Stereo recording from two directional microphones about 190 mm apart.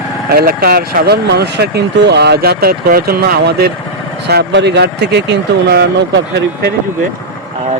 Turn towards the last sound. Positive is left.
turn(degrees=-65)  # may be behind; listen again after turning